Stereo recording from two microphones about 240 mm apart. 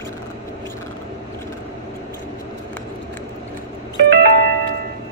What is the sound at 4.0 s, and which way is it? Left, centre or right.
Doorbell, right.